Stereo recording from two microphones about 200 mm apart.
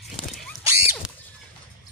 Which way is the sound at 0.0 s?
Centre (ahead or behind).